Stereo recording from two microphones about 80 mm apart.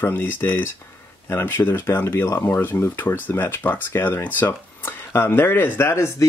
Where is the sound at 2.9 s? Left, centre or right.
Left.